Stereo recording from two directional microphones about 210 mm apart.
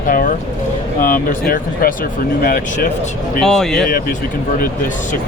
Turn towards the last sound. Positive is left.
turn(degrees=0)  # may be behind; listen again after turning